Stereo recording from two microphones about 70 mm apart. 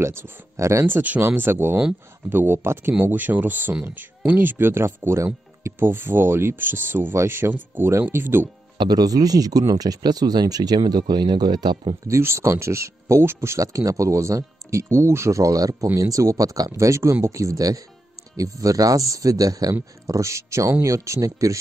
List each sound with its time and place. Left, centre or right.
0.0 s speech: right
0.8 s speech: right
5.9 s speech: right
8.7 s speech: right
12.1 s speech: right
16.7 s speech: right
19.7 s speech: right